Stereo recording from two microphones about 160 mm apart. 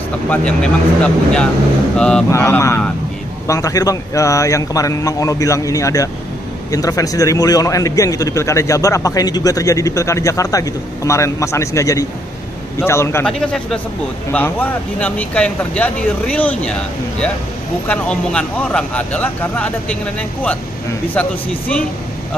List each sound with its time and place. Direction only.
0.3 s speech: 5° left (ahead or behind)
2.2 s a man's voice: 20° left (ahead or behind)
13.2 s speech: 5° left (ahead or behind)
17.8 s speech: 10° left (ahead or behind)